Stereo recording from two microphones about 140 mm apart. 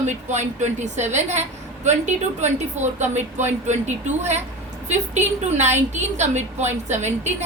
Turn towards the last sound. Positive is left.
turn(degrees=-55)  # may be behind; listen again after turning